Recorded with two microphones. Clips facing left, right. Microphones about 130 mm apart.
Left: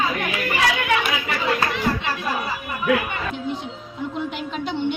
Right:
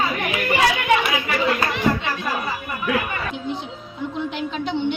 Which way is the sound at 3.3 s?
Centre (ahead or behind).